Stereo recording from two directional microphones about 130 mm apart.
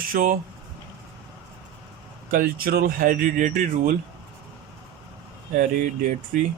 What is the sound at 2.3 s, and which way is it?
Speech, 90° right.